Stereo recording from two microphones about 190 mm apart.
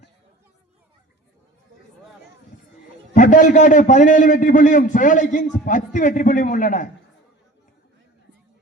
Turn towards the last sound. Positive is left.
turn(degrees=45)  # may be behind; listen again after turning